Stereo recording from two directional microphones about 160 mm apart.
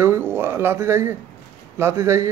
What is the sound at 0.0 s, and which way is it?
A man's voice, 15° right (ahead or behind).